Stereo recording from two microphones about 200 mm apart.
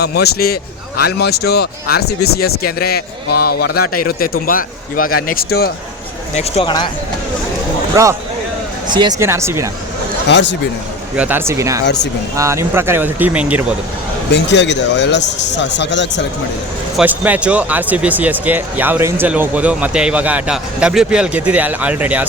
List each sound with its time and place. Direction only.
0.0 s a man's voice: 55° left (ahead or behind)
6.3 s speech: 30° left (ahead or behind)
7.9 s speech: 15° right (ahead or behind)
10.2 s speech: 60° left (ahead or behind)
11.2 s speech: 10° right (ahead or behind)
14.3 s speech: 60° left (ahead or behind)
17.0 s speech: 10° right (ahead or behind)